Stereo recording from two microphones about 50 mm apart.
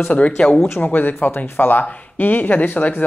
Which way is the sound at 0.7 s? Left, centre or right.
Left.